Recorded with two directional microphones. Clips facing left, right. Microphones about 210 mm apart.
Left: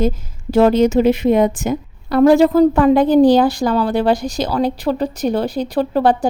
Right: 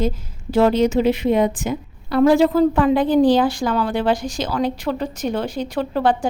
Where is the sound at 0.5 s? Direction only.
45° left (ahead or behind).